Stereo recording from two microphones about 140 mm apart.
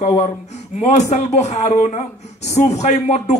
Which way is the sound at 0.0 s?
50° left (ahead or behind).